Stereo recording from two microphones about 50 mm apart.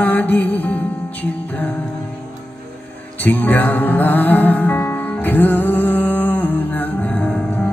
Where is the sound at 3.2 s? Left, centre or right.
Left.